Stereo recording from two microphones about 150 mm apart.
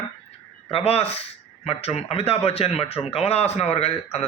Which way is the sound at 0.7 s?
40° left (ahead or behind).